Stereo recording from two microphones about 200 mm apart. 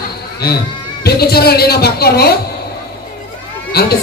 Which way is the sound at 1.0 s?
50° left (ahead or behind).